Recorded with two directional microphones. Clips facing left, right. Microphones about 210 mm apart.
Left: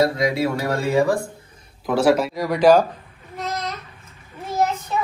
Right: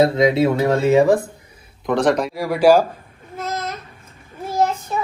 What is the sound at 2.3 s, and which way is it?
Speech, 10° right (ahead or behind).